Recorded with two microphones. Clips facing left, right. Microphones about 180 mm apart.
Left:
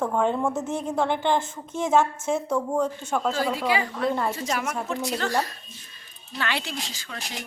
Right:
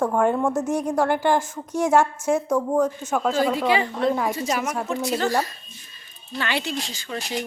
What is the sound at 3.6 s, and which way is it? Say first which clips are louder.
Speech: right 4 dB; 25° right (ahead or behind).